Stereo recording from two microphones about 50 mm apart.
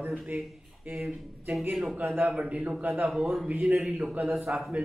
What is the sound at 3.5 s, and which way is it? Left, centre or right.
A man's voice, right.